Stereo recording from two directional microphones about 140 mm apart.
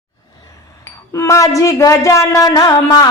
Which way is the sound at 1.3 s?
25° left (ahead or behind).